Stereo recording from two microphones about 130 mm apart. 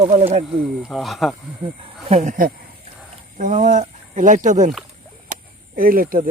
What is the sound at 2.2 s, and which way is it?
Speech, 75° right (ahead or behind).